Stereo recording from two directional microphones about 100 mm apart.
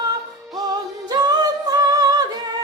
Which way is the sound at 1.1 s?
45° right (ahead or behind).